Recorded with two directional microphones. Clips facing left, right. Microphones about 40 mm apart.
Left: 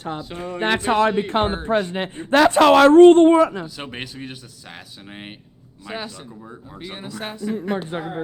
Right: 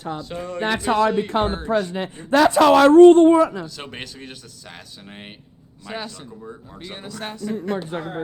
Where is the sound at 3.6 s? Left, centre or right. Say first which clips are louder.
Left 2 dB; centre.